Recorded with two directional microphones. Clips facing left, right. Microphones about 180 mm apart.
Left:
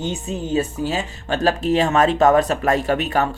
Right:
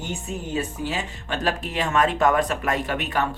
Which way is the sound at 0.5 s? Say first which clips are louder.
Left 6 dB; 35° left (ahead or behind).